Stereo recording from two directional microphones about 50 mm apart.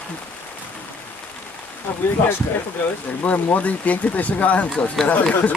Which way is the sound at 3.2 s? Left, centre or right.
Left.